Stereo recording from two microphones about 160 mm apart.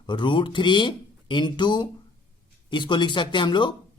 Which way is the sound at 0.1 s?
30° left (ahead or behind).